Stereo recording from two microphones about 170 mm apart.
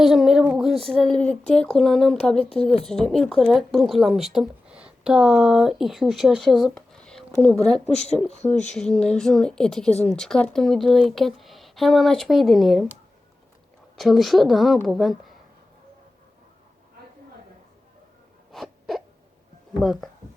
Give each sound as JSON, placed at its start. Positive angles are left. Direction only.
{"t": 0.0, "sound": "a sound", "side_deg": 0}
{"t": 0.9, "sound": "speech", "side_deg": 5}
{"t": 7.9, "sound": "speech", "side_deg": 40}
{"t": 8.7, "sound": "speech", "side_deg": 5}
{"t": 18.5, "sound": "wail", "side_deg": 0}
{"t": 19.8, "sound": "speech", "side_deg": 0}